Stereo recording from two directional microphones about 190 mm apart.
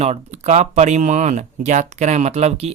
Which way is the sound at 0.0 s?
35° right (ahead or behind).